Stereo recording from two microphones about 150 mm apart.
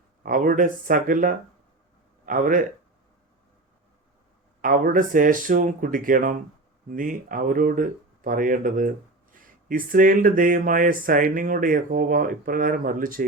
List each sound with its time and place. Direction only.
0.2 s speech: 65° right (ahead or behind)
4.6 s speech: 70° right (ahead or behind)